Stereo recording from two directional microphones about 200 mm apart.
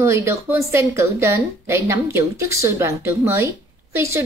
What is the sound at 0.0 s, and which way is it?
A woman's voice, 15° right (ahead or behind).